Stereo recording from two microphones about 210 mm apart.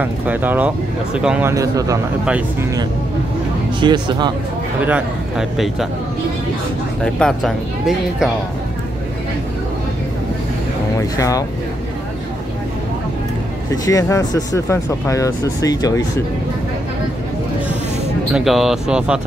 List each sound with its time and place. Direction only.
0.0 s speech: 10° right (ahead or behind)
3.8 s speech: 20° right (ahead or behind)
4.8 s speech: 5° right (ahead or behind)
7.0 s speech: 5° left (ahead or behind)
11.0 s speech: 15° left (ahead or behind)
13.8 s speech: 15° left (ahead or behind)
18.3 s speech: centre (ahead or behind)